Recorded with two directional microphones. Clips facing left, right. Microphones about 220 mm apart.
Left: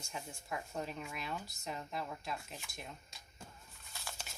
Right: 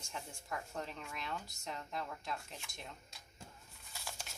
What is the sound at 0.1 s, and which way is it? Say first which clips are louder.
Speech: left 1 dB; 10° left (ahead or behind).